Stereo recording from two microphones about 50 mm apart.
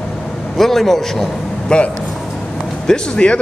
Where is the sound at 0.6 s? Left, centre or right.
Centre.